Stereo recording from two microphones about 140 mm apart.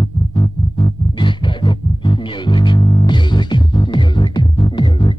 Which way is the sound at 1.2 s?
35° left (ahead or behind).